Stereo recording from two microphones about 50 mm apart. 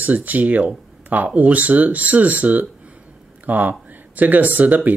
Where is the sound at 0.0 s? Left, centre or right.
Right.